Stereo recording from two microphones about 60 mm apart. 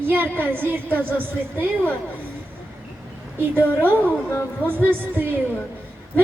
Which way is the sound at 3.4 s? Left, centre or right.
Right.